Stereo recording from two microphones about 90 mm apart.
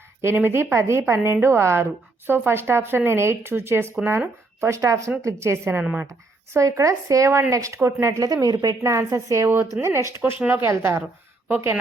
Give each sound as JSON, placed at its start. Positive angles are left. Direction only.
{"t": 0.2, "sound": "a woman's voice", "side_deg": -25}
{"t": 11.4, "sound": "speech", "side_deg": -20}